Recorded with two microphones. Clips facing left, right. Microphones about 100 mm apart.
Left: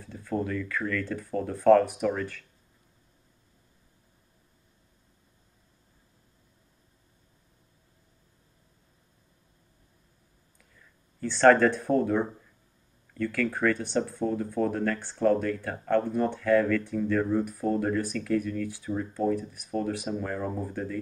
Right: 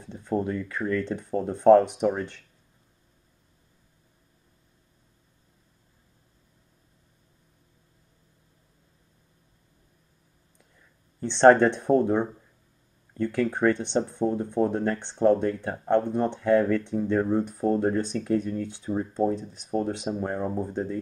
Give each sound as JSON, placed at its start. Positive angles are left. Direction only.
{"t": 0.0, "sound": "speech", "side_deg": -25}
{"t": 11.1, "sound": "speech", "side_deg": -25}